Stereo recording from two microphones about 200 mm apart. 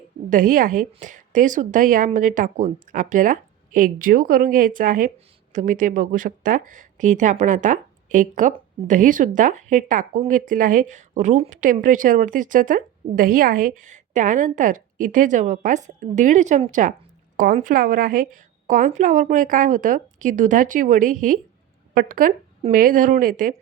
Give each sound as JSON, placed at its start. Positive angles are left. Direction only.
{"t": 0.3, "sound": "a woman's voice", "side_deg": -45}